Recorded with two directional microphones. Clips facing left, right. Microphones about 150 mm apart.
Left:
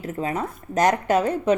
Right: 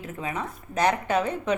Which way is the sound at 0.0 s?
40° left (ahead or behind).